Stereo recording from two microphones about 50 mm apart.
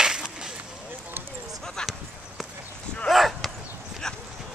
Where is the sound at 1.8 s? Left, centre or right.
Centre.